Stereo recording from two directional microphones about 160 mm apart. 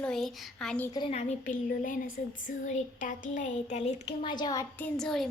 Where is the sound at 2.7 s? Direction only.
50° left (ahead or behind).